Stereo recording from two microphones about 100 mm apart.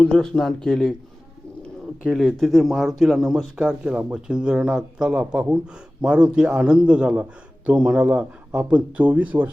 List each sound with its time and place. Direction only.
0.0 s speech: 10° left (ahead or behind)
2.0 s speech: centre (ahead or behind); by 9.5 s 15° right (ahead or behind)